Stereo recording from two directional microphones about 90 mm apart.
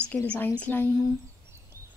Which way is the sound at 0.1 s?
20° left (ahead or behind).